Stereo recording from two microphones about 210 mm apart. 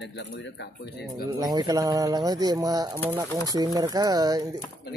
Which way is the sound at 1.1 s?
20° right (ahead or behind).